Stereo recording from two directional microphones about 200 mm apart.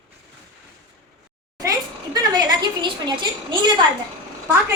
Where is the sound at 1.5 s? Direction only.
20° right (ahead or behind).